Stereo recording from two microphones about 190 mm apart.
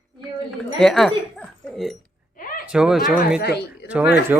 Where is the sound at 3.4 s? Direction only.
60° left (ahead or behind).